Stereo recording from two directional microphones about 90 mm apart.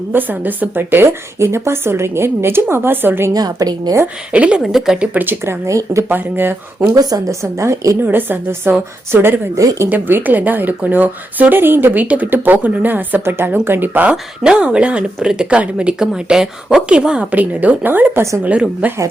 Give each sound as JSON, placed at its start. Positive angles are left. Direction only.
{"t": 0.1, "sound": "a woman's voice", "side_deg": -20}
{"t": 3.3, "sound": "a woman's voice", "side_deg": -45}
{"t": 4.0, "sound": "a woman's voice", "side_deg": -15}
{"t": 5.1, "sound": "a woman's voice", "side_deg": -20}
{"t": 6.1, "sound": "a woman's voice", "side_deg": -20}
{"t": 6.9, "sound": "a woman's voice", "side_deg": -45}
{"t": 8.0, "sound": "a woman's voice", "side_deg": -25}
{"t": 9.6, "sound": "a woman's voice", "side_deg": -35}
{"t": 9.9, "sound": "a woman's voice", "side_deg": -20}
{"t": 18.4, "sound": "speech", "side_deg": -15}